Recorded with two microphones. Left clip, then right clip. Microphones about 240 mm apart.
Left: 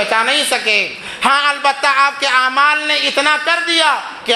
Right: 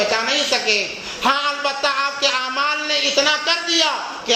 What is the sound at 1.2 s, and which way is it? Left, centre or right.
A woman's voice, left.